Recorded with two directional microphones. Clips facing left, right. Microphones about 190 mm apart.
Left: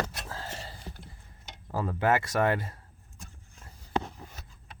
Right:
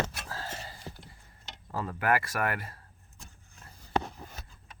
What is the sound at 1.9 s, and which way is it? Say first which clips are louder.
Speech: left 2 dB; 25° left (ahead or behind).